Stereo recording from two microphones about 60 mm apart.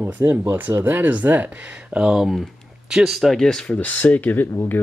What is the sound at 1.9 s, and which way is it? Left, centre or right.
Speech, centre.